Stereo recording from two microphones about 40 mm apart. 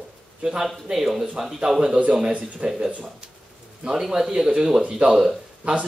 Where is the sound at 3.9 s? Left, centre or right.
Centre.